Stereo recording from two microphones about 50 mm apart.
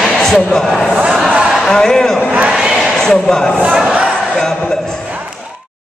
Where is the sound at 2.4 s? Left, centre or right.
Centre.